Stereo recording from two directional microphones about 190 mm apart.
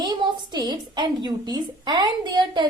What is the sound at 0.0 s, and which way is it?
Speech, 20° right (ahead or behind).